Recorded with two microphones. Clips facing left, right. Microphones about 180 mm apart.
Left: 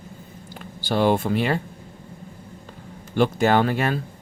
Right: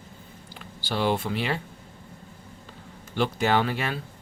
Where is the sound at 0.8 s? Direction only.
50° left (ahead or behind).